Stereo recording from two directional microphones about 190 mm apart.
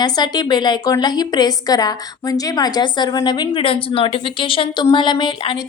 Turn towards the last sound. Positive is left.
turn(degrees=25)  # may be behind; listen again after turning